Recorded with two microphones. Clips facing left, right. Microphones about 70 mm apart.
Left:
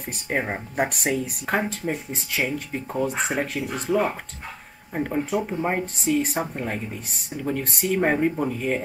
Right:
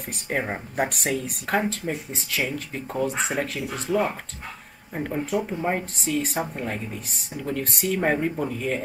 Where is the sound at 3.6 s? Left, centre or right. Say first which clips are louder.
Left 1 dB; centre.